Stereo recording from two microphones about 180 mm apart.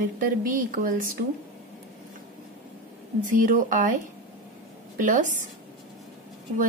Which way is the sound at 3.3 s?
45° right (ahead or behind).